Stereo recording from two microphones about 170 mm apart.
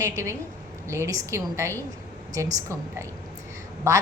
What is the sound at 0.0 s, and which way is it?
A woman's voice, 15° right (ahead or behind).